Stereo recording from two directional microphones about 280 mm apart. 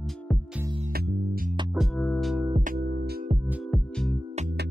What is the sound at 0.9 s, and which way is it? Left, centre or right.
Music, right.